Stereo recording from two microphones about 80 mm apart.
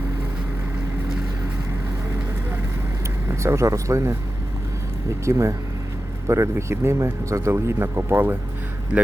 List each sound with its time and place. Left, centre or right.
3.2 s speech: right
5.2 s speech: right